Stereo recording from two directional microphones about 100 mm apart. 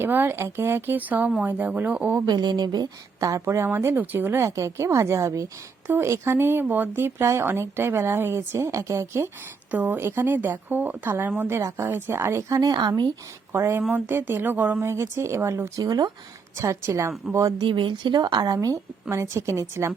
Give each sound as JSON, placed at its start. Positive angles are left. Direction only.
{"t": 0.0, "sound": "speech", "side_deg": -20}
{"t": 2.2, "sound": "a woman's voice", "side_deg": -45}
{"t": 13.5, "sound": "speech", "side_deg": -25}
{"t": 14.8, "sound": "speech", "side_deg": -30}
{"t": 17.6, "sound": "a woman's voice", "side_deg": -55}